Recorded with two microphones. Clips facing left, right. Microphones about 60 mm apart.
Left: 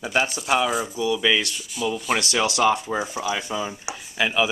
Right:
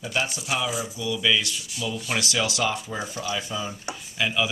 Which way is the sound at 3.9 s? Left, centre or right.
Left.